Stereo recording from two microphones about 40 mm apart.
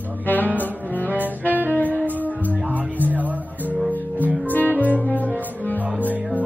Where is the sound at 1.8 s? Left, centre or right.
Right.